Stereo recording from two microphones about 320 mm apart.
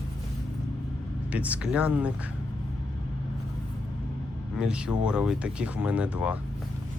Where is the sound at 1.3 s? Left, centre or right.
Centre.